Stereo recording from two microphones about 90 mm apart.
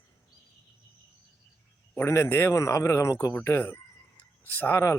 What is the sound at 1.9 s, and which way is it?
Speech, 30° left (ahead or behind).